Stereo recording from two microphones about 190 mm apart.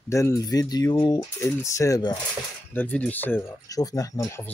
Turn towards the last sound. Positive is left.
turn(degrees=15)  # may be behind; listen again after turning